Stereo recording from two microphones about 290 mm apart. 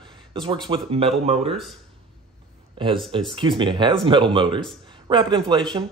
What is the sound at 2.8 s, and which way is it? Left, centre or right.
Speech, centre.